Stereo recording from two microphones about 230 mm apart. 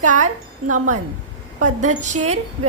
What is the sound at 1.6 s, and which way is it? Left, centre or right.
Speech, right.